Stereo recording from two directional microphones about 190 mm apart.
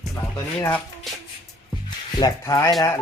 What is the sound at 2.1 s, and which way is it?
Speech, 20° left (ahead or behind).